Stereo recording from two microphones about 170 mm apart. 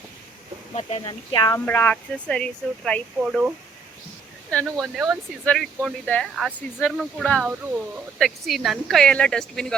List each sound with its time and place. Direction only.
0.8 s speech: 35° left (ahead or behind)
1.6 s speech: 10° left (ahead or behind); by 3.5 s 5° right (ahead or behind)
4.6 s speech: centre (ahead or behind)